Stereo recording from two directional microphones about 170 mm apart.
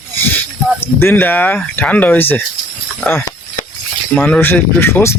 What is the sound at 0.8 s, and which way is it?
Speech, 15° left (ahead or behind).